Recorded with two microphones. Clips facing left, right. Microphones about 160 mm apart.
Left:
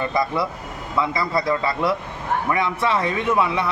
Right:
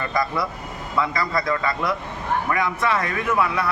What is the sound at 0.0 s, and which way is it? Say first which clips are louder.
A man's voice: left 2 dB; 25° left (ahead or behind).